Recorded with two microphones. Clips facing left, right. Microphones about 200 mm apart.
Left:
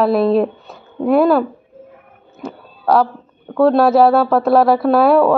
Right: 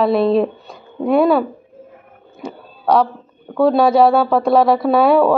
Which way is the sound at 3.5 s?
Centre (ahead or behind).